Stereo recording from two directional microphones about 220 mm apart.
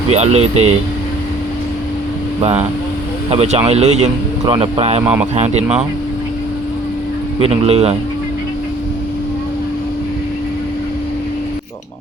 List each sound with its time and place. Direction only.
0.1 s speech: 30° right (ahead or behind)
3.2 s speech: 30° right (ahead or behind)
5.0 s speech: 5° right (ahead or behind)
5.3 s speech: 30° right (ahead or behind)
7.3 s speech: 25° right (ahead or behind)